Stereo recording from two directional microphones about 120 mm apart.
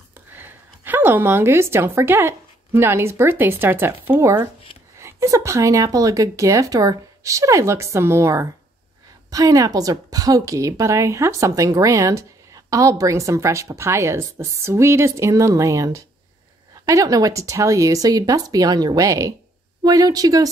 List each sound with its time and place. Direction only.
0.3 s a woman's voice: 15° right (ahead or behind)